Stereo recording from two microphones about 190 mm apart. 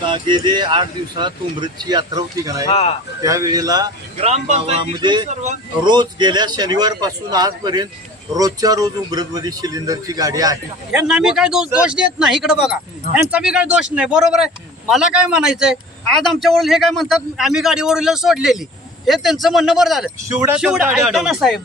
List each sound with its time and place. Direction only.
0.0 s speech: 25° right (ahead or behind)
2.6 s speech: 35° left (ahead or behind)
3.2 s speech: 15° right (ahead or behind)
4.2 s speech: 35° right (ahead or behind); by 10.6 s 20° right (ahead or behind)
10.9 s speech: 5° right (ahead or behind)